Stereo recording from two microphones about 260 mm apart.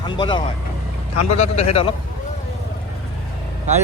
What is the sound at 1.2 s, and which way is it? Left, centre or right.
Speech, left.